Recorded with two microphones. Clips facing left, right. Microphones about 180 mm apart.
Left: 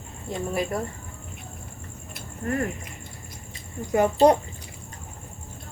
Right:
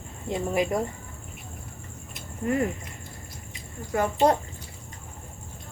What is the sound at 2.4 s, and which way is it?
Speech, 20° right (ahead or behind).